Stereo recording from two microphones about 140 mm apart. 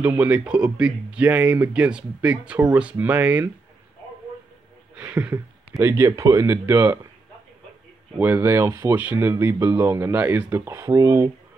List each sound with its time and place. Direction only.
0.0 s speech: 10° right (ahead or behind)
4.9 s speech: 10° right (ahead or behind)
5.8 s speech: 20° right (ahead or behind)
8.2 s speech: 15° right (ahead or behind)